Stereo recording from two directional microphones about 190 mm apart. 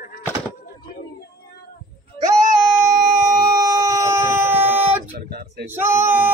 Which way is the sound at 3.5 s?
20° right (ahead or behind).